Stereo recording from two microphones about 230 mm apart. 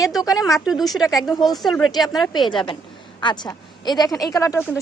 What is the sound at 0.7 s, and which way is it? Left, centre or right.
Speech, centre.